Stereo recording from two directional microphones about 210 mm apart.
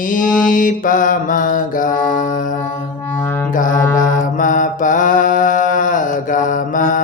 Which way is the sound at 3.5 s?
40° left (ahead or behind).